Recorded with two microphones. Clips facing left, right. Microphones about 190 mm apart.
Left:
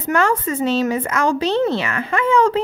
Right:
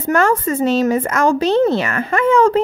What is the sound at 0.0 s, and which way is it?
A woman's voice, 45° right (ahead or behind).